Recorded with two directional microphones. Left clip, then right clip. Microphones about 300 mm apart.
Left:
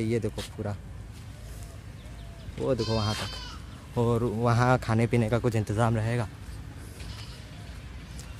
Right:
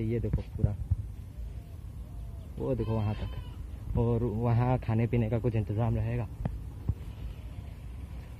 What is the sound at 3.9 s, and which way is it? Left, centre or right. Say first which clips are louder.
Speech: left 4 dB; centre.